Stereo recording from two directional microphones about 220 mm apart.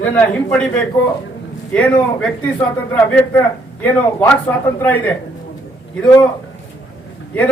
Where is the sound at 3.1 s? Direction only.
10° left (ahead or behind).